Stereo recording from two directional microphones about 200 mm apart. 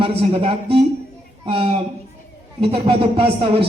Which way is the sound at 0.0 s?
25° right (ahead or behind).